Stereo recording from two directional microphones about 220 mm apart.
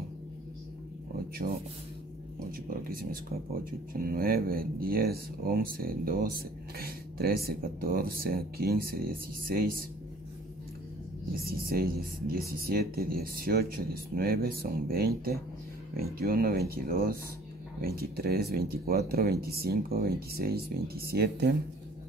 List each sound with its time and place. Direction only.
1.4 s speech: 35° right (ahead or behind)
2.7 s speech: 40° right (ahead or behind)
11.3 s speech: 45° right (ahead or behind)